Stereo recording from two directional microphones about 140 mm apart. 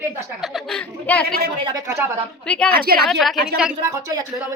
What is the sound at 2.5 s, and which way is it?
Speech, 10° left (ahead or behind).